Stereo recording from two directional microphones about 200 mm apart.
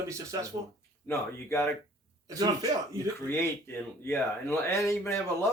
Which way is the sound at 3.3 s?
10° left (ahead or behind).